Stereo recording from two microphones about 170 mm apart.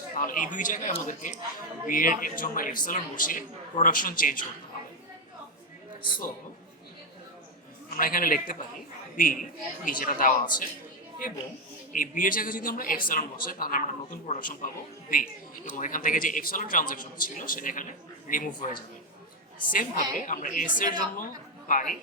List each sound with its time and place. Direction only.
0.2 s a man's voice: 50° left (ahead or behind)
7.9 s a man's voice: 55° left (ahead or behind)
11.9 s a man's voice: 55° left (ahead or behind)